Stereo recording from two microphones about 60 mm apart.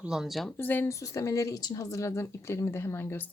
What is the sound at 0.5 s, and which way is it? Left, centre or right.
Speech, left.